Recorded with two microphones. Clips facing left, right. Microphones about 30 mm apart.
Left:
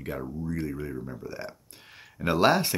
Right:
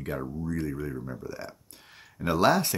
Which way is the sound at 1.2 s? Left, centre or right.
Left.